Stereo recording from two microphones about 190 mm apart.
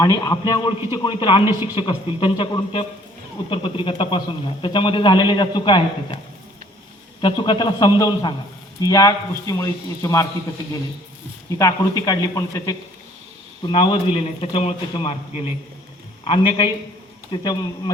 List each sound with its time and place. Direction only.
0.0 s a man's voice: 20° left (ahead or behind)
7.2 s a man's voice: 25° left (ahead or behind)
11.4 s a man's voice: 15° left (ahead or behind)
16.5 s a man's voice: 25° left (ahead or behind)